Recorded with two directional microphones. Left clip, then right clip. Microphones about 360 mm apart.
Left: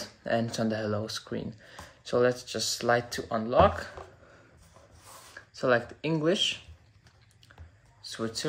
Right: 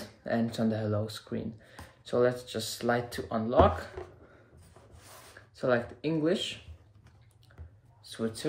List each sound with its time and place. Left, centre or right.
0.0 s speech: centre
5.6 s speech: centre
8.1 s speech: centre